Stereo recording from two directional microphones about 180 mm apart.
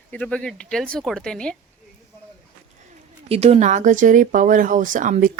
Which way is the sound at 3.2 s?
35° right (ahead or behind).